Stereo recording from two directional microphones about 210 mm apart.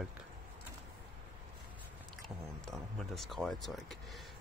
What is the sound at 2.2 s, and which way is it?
Speech, centre (ahead or behind).